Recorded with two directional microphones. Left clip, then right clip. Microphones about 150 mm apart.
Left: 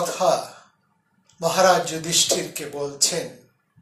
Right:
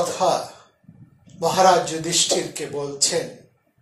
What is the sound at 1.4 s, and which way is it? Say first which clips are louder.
Speech: right 2 dB; 50° left (ahead or behind).